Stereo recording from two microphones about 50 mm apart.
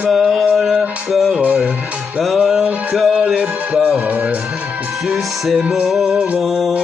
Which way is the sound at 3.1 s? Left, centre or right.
Right.